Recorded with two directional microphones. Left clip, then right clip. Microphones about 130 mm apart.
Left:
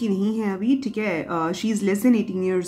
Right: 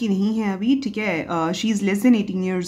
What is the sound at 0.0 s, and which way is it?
Speech, 25° right (ahead or behind).